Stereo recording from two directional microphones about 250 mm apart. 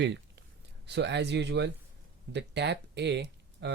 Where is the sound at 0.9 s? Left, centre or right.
Right.